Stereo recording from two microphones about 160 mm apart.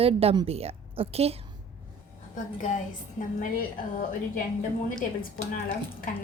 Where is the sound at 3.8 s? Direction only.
60° left (ahead or behind).